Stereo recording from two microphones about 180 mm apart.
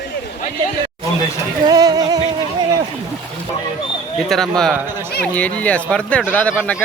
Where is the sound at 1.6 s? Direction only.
20° right (ahead or behind).